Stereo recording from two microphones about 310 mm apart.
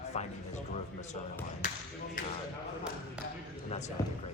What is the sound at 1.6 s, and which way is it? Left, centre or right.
Speech, left.